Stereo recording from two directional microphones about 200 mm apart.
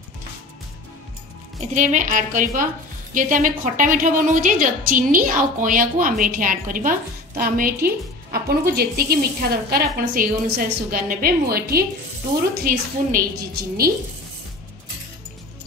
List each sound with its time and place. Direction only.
1.7 s a woman's voice: 40° right (ahead or behind)